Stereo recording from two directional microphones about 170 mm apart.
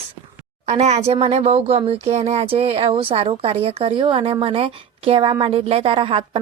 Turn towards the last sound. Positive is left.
turn(degrees=-30)  # may be behind; listen again after turning